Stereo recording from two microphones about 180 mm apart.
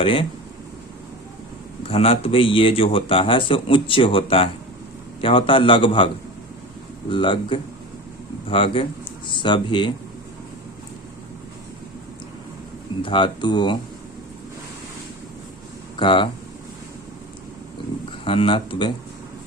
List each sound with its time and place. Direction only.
0.0 s speech: 30° left (ahead or behind)
1.8 s speech: 30° left (ahead or behind)
7.1 s speech: 30° left (ahead or behind)
13.0 s speech: 25° left (ahead or behind)
16.0 s speech: 30° left (ahead or behind)
18.3 s speech: 30° left (ahead or behind)